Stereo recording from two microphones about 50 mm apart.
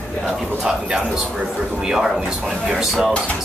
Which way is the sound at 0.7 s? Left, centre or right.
Centre.